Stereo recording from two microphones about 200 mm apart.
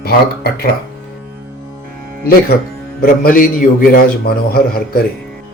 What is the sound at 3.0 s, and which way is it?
A man's voice, 45° left (ahead or behind).